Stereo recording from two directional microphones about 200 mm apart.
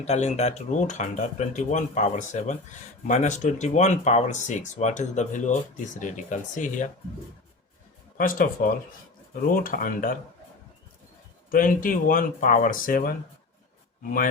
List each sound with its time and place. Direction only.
0.0 s speech: 35° left (ahead or behind)
8.2 s speech: 45° left (ahead or behind)
11.5 s speech: 45° left (ahead or behind)